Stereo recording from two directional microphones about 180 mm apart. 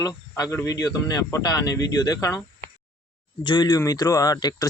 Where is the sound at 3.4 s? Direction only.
25° left (ahead or behind).